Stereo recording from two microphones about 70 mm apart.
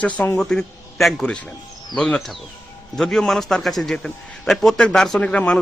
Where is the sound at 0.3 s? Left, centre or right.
Centre.